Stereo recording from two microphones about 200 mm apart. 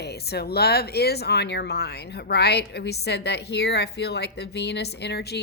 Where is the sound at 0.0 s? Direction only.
55° left (ahead or behind).